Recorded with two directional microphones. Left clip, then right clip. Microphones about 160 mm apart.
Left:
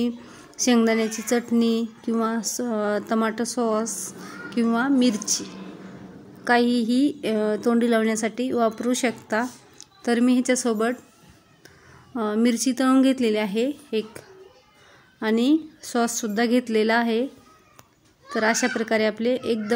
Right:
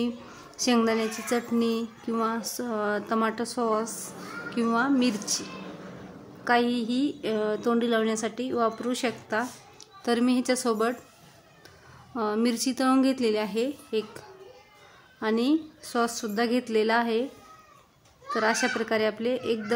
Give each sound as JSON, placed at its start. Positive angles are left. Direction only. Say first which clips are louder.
{"t": 0.0, "sound": "a woman's voice", "louder": "left 4 dB", "side_deg": 20}
{"t": 12.1, "sound": "speech", "louder": "left 3 dB", "side_deg": 15}
{"t": 18.3, "sound": "speech", "louder": "left 3 dB", "side_deg": 20}